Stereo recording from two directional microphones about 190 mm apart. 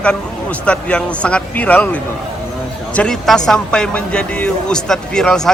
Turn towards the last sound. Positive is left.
turn(degrees=5)  # may be behind; listen again after turning